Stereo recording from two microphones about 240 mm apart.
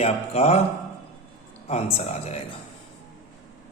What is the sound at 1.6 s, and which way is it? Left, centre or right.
Speech, left.